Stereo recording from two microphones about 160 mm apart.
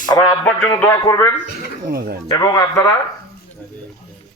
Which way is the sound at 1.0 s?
20° left (ahead or behind).